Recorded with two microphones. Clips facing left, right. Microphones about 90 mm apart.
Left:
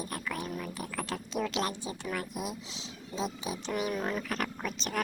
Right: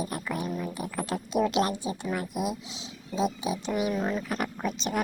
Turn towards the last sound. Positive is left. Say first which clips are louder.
# right 4 dB
turn(degrees=-15)  # may be behind; listen again after turning